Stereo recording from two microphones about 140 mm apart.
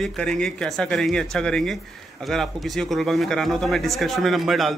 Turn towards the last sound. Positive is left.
turn(degrees=0)  # may be behind; listen again after turning